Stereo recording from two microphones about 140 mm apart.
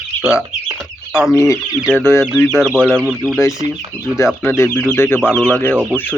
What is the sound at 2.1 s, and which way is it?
Speech, 15° left (ahead or behind).